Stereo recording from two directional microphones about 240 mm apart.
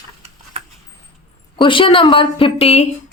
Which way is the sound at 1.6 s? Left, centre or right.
Left.